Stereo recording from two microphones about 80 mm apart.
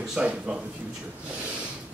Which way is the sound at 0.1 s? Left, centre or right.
Centre.